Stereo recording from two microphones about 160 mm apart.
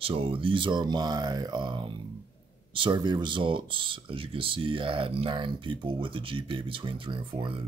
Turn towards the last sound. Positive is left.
turn(degrees=-35)  # may be behind; listen again after turning